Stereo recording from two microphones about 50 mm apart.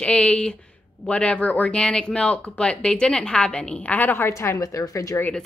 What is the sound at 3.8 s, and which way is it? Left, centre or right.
Speech, left.